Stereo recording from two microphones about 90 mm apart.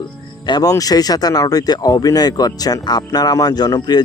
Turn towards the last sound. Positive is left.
turn(degrees=50)  # may be behind; listen again after turning